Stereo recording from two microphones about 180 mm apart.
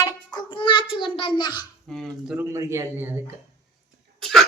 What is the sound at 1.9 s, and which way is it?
Speech, centre (ahead or behind).